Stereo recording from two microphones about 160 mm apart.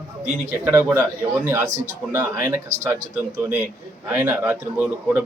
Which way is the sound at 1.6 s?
50° right (ahead or behind).